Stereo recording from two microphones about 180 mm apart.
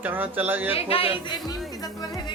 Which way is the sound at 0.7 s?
30° left (ahead or behind).